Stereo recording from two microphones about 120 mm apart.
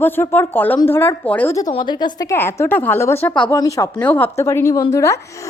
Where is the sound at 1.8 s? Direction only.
35° left (ahead or behind).